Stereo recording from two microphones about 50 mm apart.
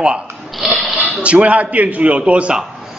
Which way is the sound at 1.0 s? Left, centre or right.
Right.